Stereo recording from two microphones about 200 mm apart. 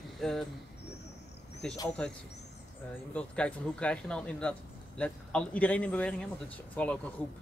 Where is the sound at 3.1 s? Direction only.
5° left (ahead or behind).